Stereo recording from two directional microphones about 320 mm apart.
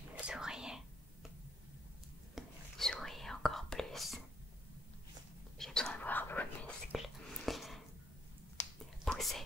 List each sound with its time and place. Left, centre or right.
0.1 s whispering: centre
2.3 s whispering: centre
5.6 s whispering: centre
7.4 s a sound: centre
8.6 s whispering: left
9.0 s whispering: centre